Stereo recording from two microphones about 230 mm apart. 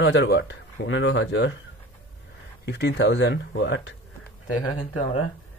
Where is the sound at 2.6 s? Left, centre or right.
Left.